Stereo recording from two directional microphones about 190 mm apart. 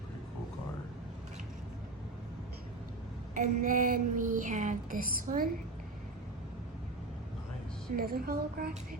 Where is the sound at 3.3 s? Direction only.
45° right (ahead or behind).